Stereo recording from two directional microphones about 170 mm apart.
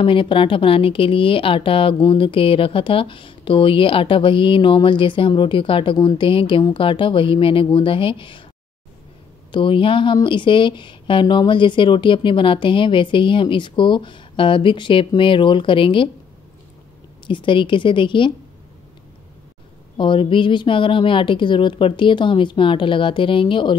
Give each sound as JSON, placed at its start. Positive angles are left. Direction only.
{"t": 0.0, "sound": "speech", "side_deg": 30}
{"t": 9.5, "sound": "speech", "side_deg": 30}
{"t": 17.3, "sound": "speech", "side_deg": 30}
{"t": 20.0, "sound": "speech", "side_deg": 30}